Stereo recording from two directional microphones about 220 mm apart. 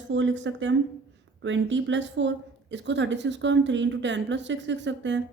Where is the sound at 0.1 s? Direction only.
55° right (ahead or behind).